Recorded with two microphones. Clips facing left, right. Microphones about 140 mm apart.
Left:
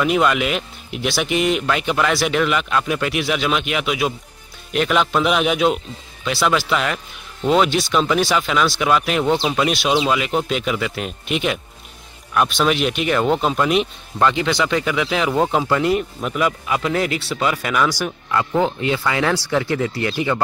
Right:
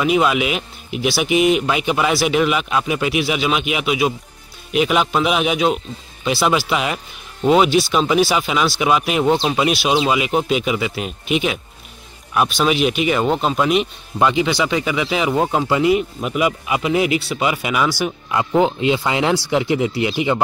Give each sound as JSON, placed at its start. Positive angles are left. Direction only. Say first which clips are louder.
{"t": 0.0, "sound": "a man's voice", "louder": "right 1 dB", "side_deg": -5}
{"t": 6.2, "sound": "a man's voice", "louder": "right 2 dB", "side_deg": -10}